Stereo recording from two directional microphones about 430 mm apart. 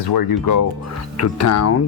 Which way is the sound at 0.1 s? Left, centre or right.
Left.